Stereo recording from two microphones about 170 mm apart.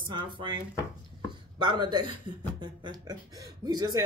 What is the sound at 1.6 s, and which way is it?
Speech, 25° right (ahead or behind).